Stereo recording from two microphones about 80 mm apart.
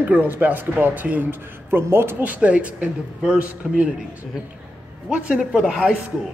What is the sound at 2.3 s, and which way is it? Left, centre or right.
A man's voice, centre.